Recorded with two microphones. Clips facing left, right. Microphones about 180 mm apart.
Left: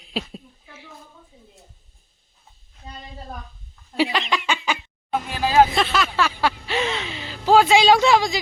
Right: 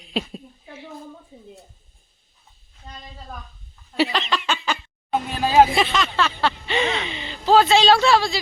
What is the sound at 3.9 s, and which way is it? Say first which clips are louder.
Speech: even; 10° left (ahead or behind).